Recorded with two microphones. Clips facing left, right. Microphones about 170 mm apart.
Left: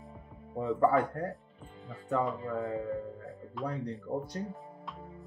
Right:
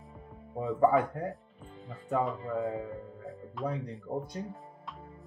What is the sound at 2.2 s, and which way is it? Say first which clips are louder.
Speech: right 1 dB; centre (ahead or behind).